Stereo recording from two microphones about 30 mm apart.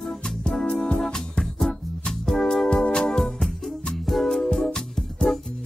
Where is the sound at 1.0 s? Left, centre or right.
Left.